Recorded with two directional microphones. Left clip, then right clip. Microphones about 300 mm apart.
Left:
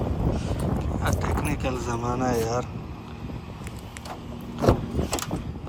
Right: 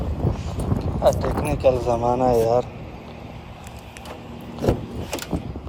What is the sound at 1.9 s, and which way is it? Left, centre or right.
Speech, centre.